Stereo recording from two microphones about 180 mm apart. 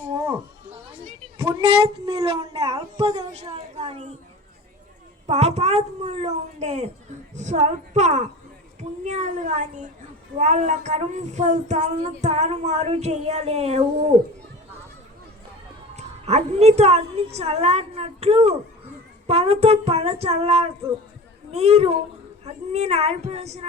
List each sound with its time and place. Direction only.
0.9 s a woman's voice: 30° right (ahead or behind)
5.2 s child singing: 40° right (ahead or behind)
16.0 s child singing: 35° right (ahead or behind)